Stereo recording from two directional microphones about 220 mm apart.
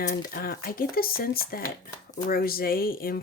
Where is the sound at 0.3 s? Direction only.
40° left (ahead or behind).